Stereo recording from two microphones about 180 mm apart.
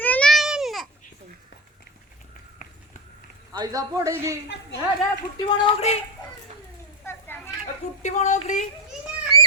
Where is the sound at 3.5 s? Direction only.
20° right (ahead or behind).